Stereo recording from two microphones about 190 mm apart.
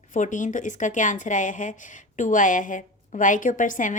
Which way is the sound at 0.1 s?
40° left (ahead or behind).